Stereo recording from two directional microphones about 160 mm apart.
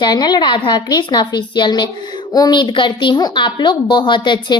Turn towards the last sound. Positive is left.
turn(degrees=30)  # may be behind; listen again after turning